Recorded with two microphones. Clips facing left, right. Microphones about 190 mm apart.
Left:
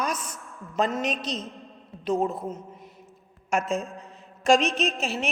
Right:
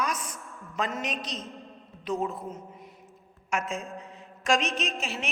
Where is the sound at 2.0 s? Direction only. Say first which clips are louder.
Left 5 dB; 35° left (ahead or behind).